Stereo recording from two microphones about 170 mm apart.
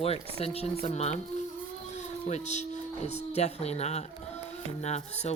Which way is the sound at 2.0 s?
40° left (ahead or behind).